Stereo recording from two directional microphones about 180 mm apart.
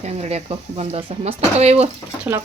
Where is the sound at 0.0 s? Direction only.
35° right (ahead or behind).